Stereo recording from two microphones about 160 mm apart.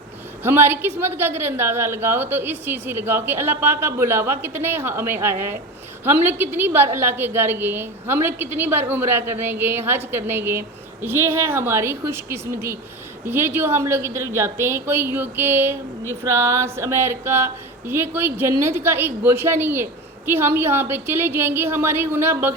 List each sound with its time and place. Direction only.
0.4 s speech: 15° right (ahead or behind)